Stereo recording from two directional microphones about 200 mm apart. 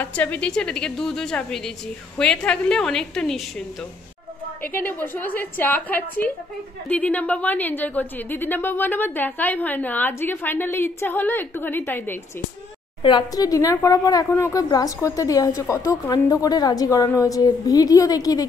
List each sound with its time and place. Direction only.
0.0 s a woman's voice: 10° left (ahead or behind)
4.6 s a woman's voice: 10° left (ahead or behind)
13.0 s a woman's voice: 20° left (ahead or behind)